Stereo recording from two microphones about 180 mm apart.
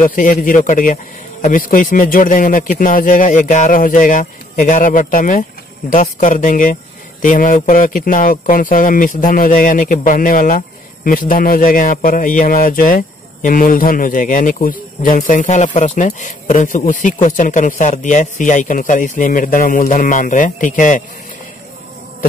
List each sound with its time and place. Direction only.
0.0 s a man's voice: 45° left (ahead or behind)